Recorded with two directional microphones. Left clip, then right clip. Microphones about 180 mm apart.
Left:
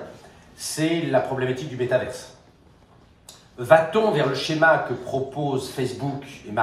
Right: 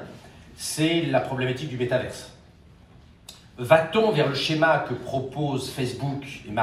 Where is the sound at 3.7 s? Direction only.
20° left (ahead or behind).